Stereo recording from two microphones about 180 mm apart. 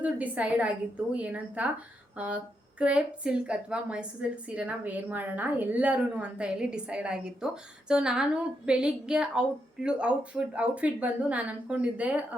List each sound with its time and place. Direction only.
0.0 s a woman's voice: 10° right (ahead or behind)